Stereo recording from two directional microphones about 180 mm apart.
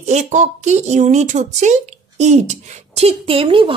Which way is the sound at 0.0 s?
40° right (ahead or behind).